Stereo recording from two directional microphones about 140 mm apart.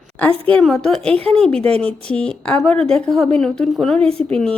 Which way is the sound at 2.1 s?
5° left (ahead or behind).